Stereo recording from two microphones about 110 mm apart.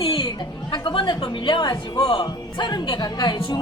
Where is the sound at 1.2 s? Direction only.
45° left (ahead or behind).